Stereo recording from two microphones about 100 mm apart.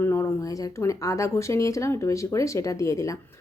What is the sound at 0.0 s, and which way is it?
Speech, 30° left (ahead or behind).